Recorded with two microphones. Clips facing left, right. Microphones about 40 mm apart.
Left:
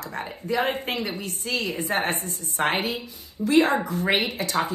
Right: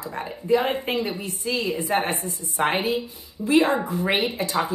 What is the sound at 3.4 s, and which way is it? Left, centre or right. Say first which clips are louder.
Speech: right 1 dB; centre.